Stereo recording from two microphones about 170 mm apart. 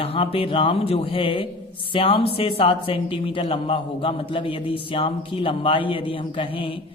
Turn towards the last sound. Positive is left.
turn(degrees=30)  # may be behind; listen again after turning